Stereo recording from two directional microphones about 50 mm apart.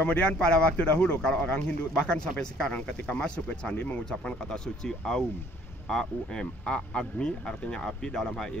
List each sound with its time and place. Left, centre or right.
0.0 s a man's voice: left
3.7 s speech: left
4.0 s a man's voice: left